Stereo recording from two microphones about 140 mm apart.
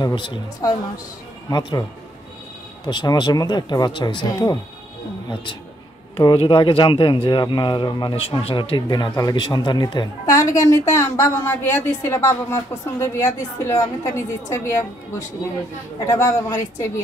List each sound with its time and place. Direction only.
0.0 s speech: 35° left (ahead or behind)
0.6 s a woman's voice: 25° left (ahead or behind)
16.1 s a woman's voice: 25° left (ahead or behind)